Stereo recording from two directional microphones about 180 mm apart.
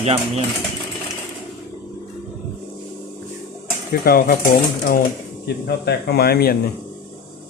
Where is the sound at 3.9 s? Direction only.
55° left (ahead or behind).